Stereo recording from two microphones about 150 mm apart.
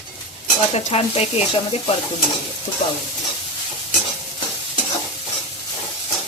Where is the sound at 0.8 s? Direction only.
45° left (ahead or behind).